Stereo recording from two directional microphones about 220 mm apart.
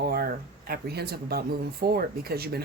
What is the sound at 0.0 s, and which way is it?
Speech, 45° right (ahead or behind).